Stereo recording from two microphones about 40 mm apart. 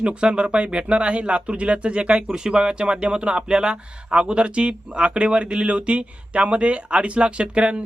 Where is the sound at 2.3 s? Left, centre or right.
Centre.